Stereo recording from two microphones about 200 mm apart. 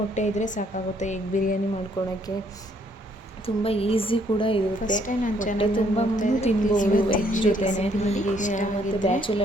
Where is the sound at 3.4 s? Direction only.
30° left (ahead or behind).